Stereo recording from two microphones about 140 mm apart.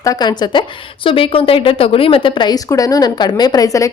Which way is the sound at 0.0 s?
25° left (ahead or behind).